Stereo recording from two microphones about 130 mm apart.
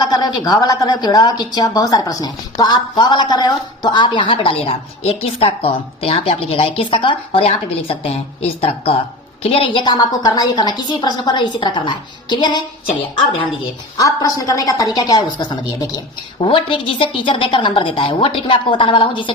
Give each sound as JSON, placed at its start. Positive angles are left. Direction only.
{"t": 0.0, "sound": "a woman's voice", "side_deg": 30}
{"t": 13.9, "sound": "a woman's voice", "side_deg": 25}